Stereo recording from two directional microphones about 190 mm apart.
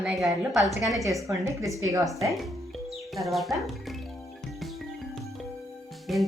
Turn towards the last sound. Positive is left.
turn(degrees=0)  # may be behind; listen again after turning